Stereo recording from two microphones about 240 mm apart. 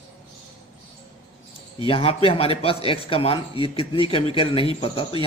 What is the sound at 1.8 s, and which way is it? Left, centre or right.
A man's voice, left.